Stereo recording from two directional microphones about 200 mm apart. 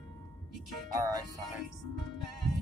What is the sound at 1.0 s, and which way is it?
Speech, 15° right (ahead or behind).